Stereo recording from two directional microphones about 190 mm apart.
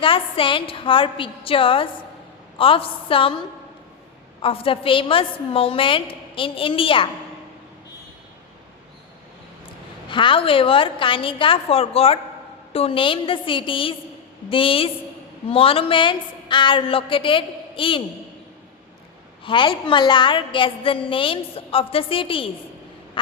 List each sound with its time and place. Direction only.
0.0 s a woman's voice: 25° left (ahead or behind)
4.4 s a woman's voice: 30° left (ahead or behind)
10.1 s a woman's voice: 25° left (ahead or behind)
19.5 s a woman's voice: 25° left (ahead or behind)
23.2 s quack: 25° left (ahead or behind)